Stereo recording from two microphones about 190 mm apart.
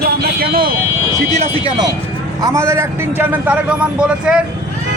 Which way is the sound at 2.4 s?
15° right (ahead or behind).